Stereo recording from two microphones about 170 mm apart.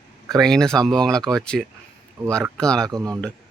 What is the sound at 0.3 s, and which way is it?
Speech, centre (ahead or behind).